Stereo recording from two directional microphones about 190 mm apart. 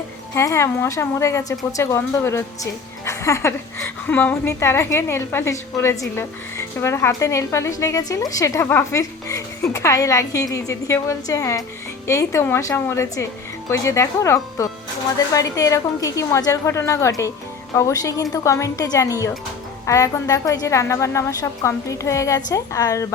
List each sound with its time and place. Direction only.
0.3 s a woman's voice: 15° left (ahead or behind)